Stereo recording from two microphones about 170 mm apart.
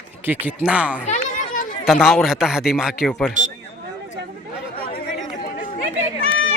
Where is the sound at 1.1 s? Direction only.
50° left (ahead or behind).